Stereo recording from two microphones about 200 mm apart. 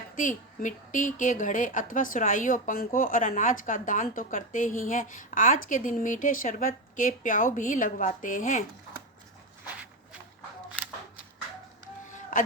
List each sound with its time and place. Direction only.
0.2 s a woman's voice: 40° left (ahead or behind)
12.0 s music: 40° left (ahead or behind)